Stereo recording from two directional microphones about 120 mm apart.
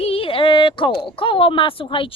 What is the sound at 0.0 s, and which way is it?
Speech, 50° left (ahead or behind).